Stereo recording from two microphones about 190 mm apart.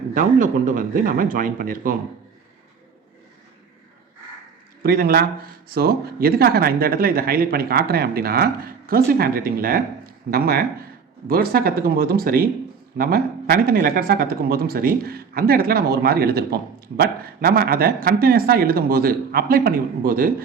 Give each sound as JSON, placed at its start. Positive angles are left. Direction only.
{"t": 0.1, "sound": "speech", "side_deg": -45}
{"t": 4.8, "sound": "speech", "side_deg": -50}